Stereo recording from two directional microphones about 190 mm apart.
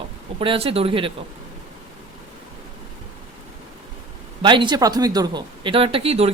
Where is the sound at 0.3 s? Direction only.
30° right (ahead or behind).